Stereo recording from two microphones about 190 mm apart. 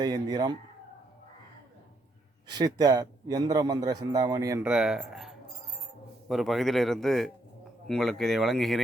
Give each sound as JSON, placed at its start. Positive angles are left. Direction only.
{"t": 0.0, "sound": "a man's voice", "side_deg": -20}
{"t": 2.5, "sound": "a man's voice", "side_deg": -20}
{"t": 4.6, "sound": "a man's voice", "side_deg": -5}